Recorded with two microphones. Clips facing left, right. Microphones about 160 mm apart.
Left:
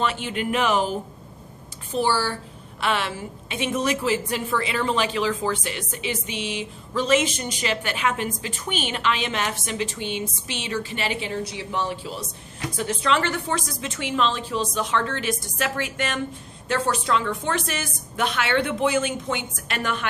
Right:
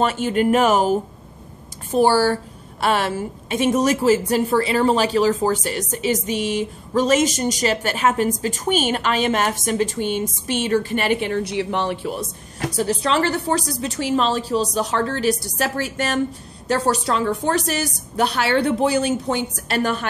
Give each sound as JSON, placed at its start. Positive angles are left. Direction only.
{"t": 0.0, "sound": "a woman's voice", "side_deg": -45}
{"t": 12.7, "sound": "a woman's voice", "side_deg": -35}